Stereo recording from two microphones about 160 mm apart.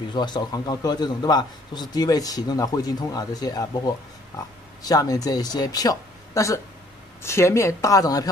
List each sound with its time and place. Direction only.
0.1 s a man's voice: 25° left (ahead or behind)